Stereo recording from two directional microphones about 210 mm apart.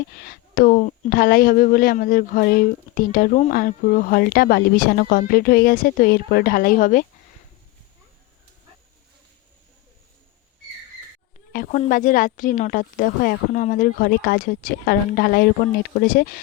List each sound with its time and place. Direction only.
0.2 s speech: 45° left (ahead or behind)
11.5 s a woman's voice: 40° left (ahead or behind)